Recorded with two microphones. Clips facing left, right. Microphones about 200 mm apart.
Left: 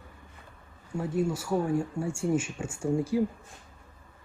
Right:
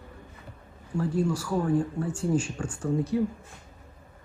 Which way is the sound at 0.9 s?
25° left (ahead or behind).